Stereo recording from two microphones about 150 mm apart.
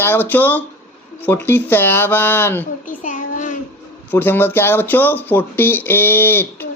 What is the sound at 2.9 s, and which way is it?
Child singing, 55° left (ahead or behind).